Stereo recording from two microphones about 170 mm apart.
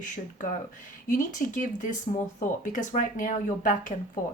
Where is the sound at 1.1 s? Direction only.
50° left (ahead or behind).